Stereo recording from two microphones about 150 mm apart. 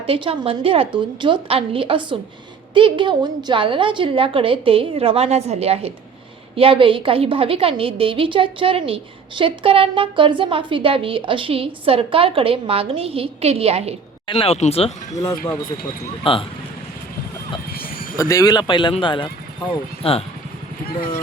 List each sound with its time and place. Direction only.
0.0 s a woman's voice: 40° right (ahead or behind)
14.3 s speech: 40° left (ahead or behind)
15.1 s speech: 25° left (ahead or behind)
16.2 s speech: 35° left (ahead or behind)
17.7 s a sound: 75° left (ahead or behind)
18.2 s speech: 20° left (ahead or behind); by 20.2 s 40° left (ahead or behind)